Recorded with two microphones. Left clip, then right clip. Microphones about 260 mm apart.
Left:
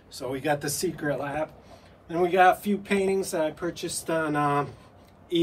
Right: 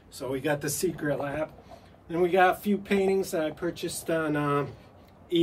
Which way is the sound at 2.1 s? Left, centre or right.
Centre.